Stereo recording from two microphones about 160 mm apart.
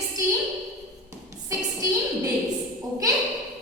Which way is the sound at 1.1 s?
20° right (ahead or behind).